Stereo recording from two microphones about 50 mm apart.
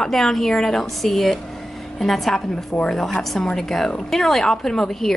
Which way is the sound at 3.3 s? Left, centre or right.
Centre.